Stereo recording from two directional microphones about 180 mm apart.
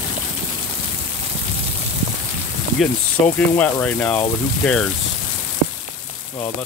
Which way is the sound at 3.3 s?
10° left (ahead or behind).